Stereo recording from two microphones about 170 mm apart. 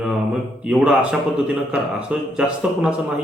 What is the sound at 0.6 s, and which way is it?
Speech, 5° right (ahead or behind).